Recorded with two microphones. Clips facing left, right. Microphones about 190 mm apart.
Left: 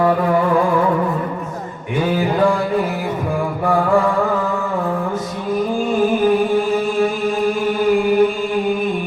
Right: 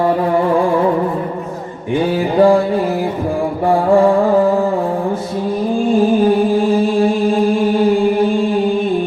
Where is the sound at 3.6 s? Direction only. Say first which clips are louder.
Right 5 dB; 30° right (ahead or behind).